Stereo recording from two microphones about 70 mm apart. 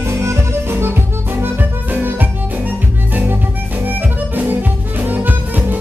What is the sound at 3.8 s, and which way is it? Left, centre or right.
Harmonica, right.